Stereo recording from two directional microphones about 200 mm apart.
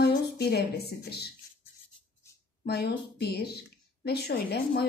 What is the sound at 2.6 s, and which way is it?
Speech, 55° left (ahead or behind).